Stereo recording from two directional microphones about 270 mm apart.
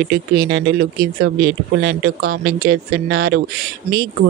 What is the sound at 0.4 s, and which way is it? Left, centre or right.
Speech, right.